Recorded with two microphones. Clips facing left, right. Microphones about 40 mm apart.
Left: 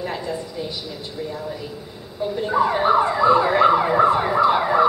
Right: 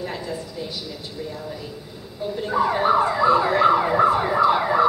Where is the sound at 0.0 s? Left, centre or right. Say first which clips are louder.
Left 3 dB; centre.